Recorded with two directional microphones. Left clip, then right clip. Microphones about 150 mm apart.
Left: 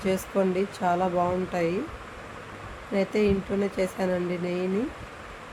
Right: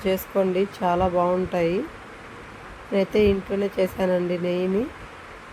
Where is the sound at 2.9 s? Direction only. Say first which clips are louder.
Right 5 dB; 15° right (ahead or behind).